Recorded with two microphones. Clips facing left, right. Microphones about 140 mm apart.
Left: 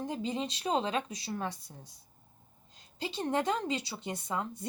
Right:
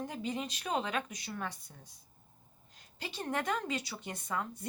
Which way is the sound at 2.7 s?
25° left (ahead or behind).